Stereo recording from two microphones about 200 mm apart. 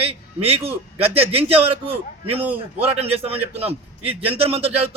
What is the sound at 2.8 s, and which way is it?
A man's voice, 30° right (ahead or behind).